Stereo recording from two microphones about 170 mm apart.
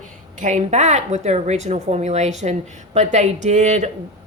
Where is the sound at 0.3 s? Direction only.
45° right (ahead or behind).